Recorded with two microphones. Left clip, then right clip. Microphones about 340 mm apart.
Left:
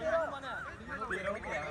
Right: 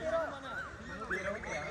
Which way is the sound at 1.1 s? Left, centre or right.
Left.